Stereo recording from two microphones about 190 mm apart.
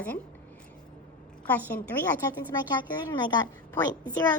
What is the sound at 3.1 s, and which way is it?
Speech, 20° left (ahead or behind).